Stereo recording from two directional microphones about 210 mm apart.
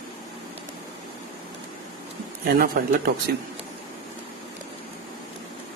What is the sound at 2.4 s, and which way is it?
Speech, 45° right (ahead or behind).